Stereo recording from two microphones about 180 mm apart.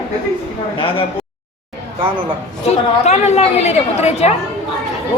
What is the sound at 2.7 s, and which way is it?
A woman's voice, 35° left (ahead or behind).